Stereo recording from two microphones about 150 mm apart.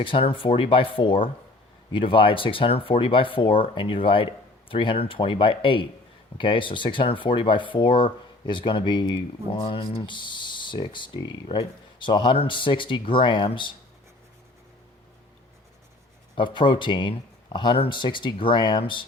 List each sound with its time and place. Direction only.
0.0 s speech: 35° left (ahead or behind)
16.3 s speech: 35° left (ahead or behind)